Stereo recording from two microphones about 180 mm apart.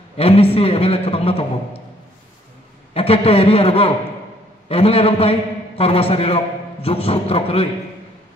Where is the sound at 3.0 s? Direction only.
35° left (ahead or behind).